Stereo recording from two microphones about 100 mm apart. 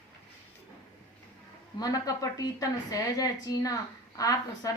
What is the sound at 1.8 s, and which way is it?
A woman's voice, 40° left (ahead or behind).